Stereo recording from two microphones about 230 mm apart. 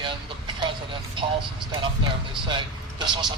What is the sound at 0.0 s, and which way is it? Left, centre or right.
Vehicle, right.